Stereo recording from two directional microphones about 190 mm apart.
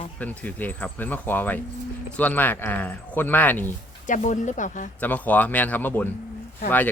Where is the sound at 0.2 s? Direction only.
10° left (ahead or behind).